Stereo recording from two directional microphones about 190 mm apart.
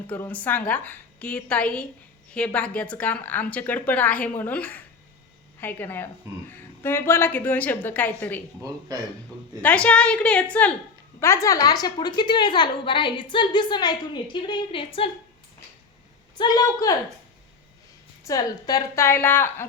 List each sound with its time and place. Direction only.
0.1 s a woman's voice: 10° left (ahead or behind)
8.9 s a man's voice: 20° right (ahead or behind)
9.6 s a woman's voice: 5° left (ahead or behind); by 15.1 s 30° left (ahead or behind)
16.4 s a woman's voice: 20° left (ahead or behind)
18.3 s a woman's voice: 20° left (ahead or behind)